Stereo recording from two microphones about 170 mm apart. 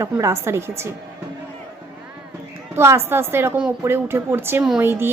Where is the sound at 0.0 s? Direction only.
20° right (ahead or behind).